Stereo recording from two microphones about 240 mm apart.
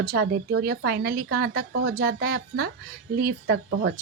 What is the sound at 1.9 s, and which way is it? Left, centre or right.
Speech, right.